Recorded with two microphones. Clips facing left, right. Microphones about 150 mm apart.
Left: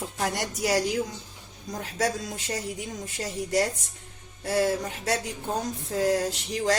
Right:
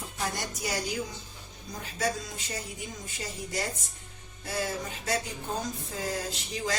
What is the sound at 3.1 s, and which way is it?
A woman's voice, 75° left (ahead or behind).